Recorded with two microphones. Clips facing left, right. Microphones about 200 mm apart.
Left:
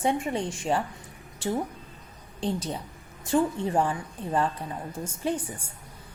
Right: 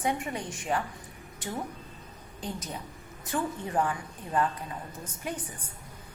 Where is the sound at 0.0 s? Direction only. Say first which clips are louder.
Left 5 dB; 25° left (ahead or behind).